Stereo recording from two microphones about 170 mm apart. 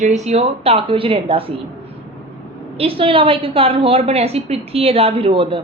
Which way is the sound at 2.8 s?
35° right (ahead or behind).